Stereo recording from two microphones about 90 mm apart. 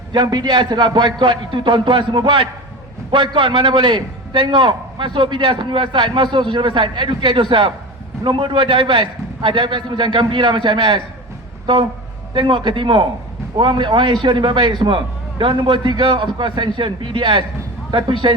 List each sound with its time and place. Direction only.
0.1 s a man's voice: 55° right (ahead or behind); by 18.3 s 70° right (ahead or behind)